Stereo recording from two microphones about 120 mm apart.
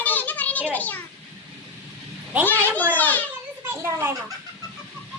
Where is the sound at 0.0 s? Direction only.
15° left (ahead or behind).